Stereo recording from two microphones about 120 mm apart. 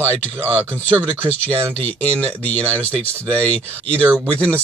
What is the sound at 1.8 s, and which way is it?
Speech, 10° left (ahead or behind).